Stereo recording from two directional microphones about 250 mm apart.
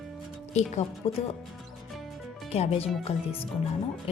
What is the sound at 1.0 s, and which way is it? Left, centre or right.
Speech, left.